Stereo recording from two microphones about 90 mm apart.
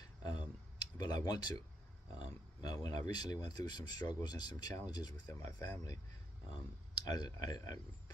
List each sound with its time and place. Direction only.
0.0 s a sound: 50° left (ahead or behind)
2.1 s speech: 55° left (ahead or behind)
5.3 s speech: 35° left (ahead or behind)
6.5 s speech: 50° left (ahead or behind)